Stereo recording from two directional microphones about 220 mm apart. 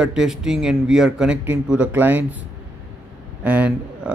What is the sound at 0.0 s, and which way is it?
Speech, 5° right (ahead or behind).